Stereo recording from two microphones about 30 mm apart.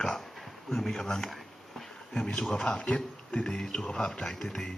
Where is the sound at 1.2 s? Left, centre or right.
Centre.